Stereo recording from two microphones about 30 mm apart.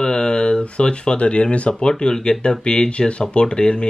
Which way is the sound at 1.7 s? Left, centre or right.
Left.